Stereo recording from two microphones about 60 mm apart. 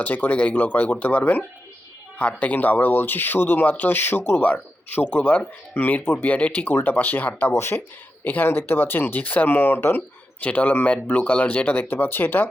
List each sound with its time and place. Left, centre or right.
0.0 s speech: left
4.4 s speech: left
7.5 s speech: left
8.2 s speech: left
10.4 s speech: left